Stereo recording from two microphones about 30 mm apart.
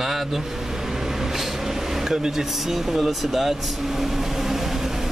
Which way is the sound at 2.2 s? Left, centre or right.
Centre.